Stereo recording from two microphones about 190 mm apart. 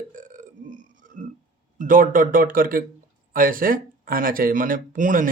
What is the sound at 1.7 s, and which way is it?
Speech, 45° right (ahead or behind).